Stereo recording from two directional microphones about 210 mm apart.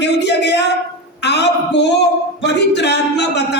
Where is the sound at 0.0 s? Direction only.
55° left (ahead or behind).